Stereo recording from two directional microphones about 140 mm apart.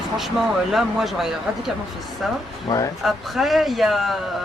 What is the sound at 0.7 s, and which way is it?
Speech, centre (ahead or behind).